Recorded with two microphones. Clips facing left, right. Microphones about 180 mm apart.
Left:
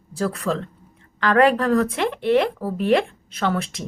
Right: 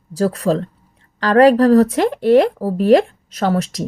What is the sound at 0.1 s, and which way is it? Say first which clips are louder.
Speech: right 7 dB; 35° right (ahead or behind).